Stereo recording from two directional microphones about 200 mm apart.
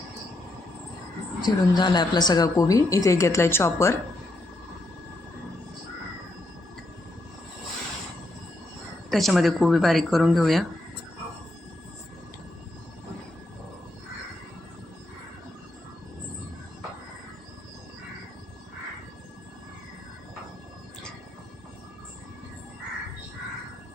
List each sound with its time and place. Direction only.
1.4 s a woman's voice: 20° left (ahead or behind)
9.0 s speech: centre (ahead or behind)